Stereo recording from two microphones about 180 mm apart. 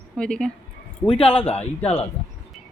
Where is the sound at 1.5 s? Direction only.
5° left (ahead or behind).